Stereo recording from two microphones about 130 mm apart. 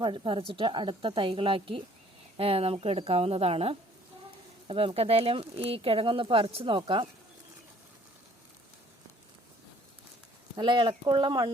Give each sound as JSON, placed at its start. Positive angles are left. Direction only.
{"t": 0.0, "sound": "a woman's voice", "side_deg": -40}
{"t": 10.6, "sound": "a woman's voice", "side_deg": -35}